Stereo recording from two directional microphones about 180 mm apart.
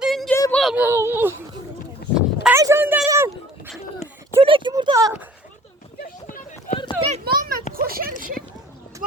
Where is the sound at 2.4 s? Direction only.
15° right (ahead or behind).